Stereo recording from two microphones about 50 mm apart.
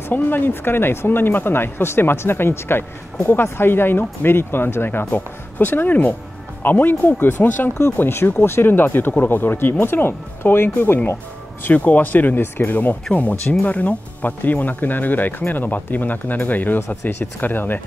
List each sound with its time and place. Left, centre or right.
0.1 s speech: left
11.6 s speech: left
13.1 s speech: left